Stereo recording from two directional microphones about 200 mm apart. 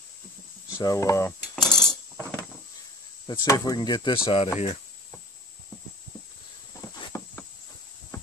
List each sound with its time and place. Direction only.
0.7 s speech: 15° left (ahead or behind)
1.5 s cutlery: centre (ahead or behind)
3.3 s speech: 20° left (ahead or behind)
7.1 s insect: 15° left (ahead or behind)